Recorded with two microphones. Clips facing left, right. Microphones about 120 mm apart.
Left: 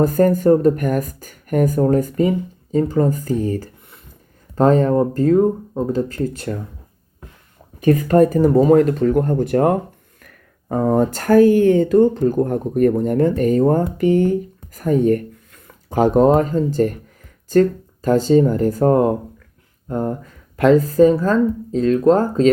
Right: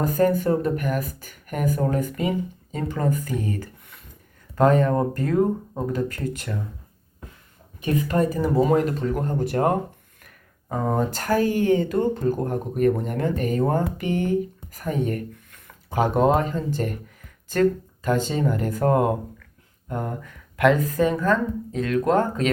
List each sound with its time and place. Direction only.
0.0 s speech: 45° left (ahead or behind)
7.8 s speech: 45° left (ahead or behind)